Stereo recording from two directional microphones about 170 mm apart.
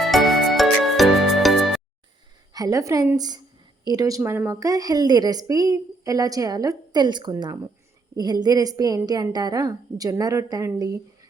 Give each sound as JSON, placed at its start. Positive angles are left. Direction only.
{"t": 0.1, "sound": "music", "side_deg": 0}
{"t": 2.5, "sound": "a woman's voice", "side_deg": -20}